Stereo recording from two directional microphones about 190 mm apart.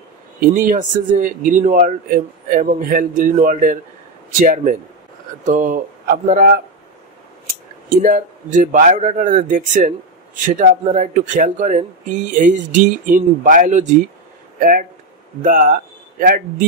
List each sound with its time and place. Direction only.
0.4 s speech: 45° right (ahead or behind)
8.0 s speech: 45° right (ahead or behind)
15.4 s speech: 45° right (ahead or behind)